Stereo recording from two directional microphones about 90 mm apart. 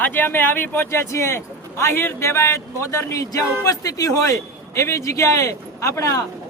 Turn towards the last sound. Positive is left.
turn(degrees=35)  # may be behind; listen again after turning